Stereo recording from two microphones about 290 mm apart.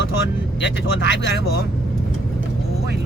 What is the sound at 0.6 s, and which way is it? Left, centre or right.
Speech, left.